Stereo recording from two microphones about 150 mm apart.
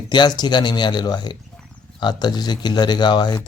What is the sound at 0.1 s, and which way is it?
Speech, 30° left (ahead or behind).